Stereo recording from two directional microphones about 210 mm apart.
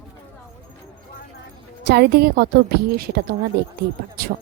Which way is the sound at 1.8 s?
50° right (ahead or behind).